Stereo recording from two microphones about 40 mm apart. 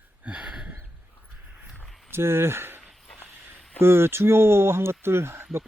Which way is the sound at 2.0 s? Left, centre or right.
Right.